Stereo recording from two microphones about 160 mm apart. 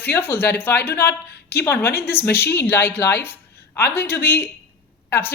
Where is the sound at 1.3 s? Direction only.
85° left.